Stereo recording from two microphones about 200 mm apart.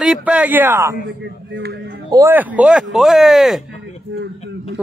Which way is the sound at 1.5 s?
60° right (ahead or behind).